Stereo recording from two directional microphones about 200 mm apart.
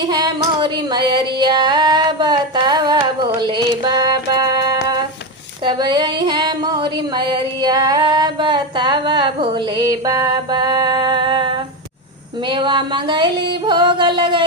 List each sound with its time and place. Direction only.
0.0 s female singing: 20° right (ahead or behind)
5.6 s a sound: 20° right (ahead or behind)
13.7 s music: 25° right (ahead or behind)